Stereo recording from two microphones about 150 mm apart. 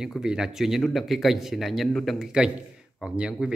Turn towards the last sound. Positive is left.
turn(degrees=-5)  # may be behind; listen again after turning